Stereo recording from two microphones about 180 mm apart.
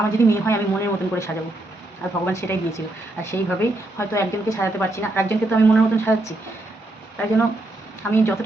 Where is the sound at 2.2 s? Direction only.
15° left (ahead or behind).